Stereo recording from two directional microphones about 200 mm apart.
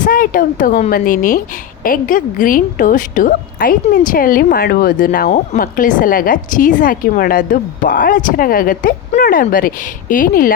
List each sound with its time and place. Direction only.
0.0 s a woman's voice: 45° left (ahead or behind)